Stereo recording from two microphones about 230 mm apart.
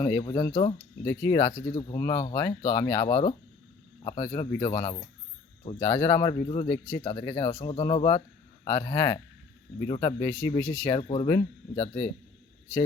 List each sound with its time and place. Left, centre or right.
0.0 s speech: centre
1.0 s speech: centre
1.4 s speech: left